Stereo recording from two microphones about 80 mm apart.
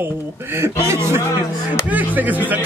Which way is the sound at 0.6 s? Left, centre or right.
Right.